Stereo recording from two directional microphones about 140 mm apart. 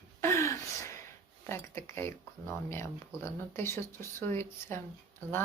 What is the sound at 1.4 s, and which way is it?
Speech, 20° left (ahead or behind).